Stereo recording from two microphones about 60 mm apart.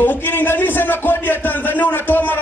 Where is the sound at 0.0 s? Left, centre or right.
Left.